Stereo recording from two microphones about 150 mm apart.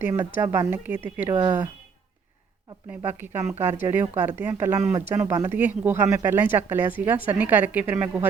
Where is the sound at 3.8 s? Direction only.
15° right (ahead or behind).